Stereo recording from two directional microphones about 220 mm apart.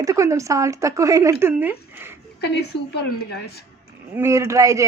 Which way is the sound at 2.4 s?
50° left (ahead or behind).